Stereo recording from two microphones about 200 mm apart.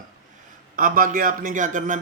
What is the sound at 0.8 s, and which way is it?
Speech, 45° right (ahead or behind).